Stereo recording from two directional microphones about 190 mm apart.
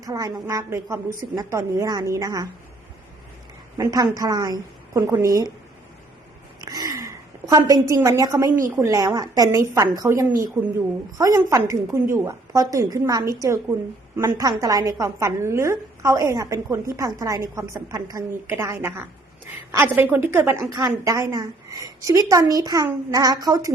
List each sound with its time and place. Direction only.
0.0 s a woman's voice: 20° right (ahead or behind)
3.8 s a woman's voice: 15° right (ahead or behind)
6.7 s a sound: 20° right (ahead or behind)
8.7 s a woman's voice: 15° right (ahead or behind)